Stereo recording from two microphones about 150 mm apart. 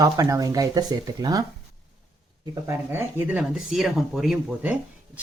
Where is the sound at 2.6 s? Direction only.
15° right (ahead or behind).